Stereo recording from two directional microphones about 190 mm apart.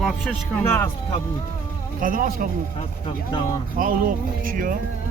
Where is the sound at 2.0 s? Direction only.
45° right (ahead or behind).